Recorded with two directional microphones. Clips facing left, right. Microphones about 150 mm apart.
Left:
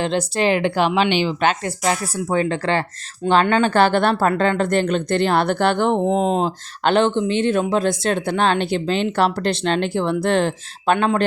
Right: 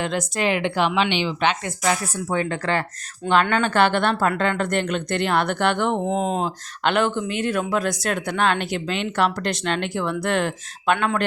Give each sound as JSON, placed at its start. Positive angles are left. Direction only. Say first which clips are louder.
{"t": 0.0, "sound": "speech", "louder": "left 4 dB", "side_deg": 30}